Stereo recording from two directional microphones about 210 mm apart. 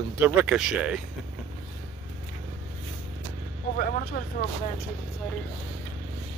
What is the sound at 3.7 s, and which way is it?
Speech, 45° left (ahead or behind).